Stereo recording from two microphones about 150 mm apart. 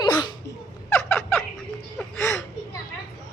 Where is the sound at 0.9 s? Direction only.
10° left (ahead or behind).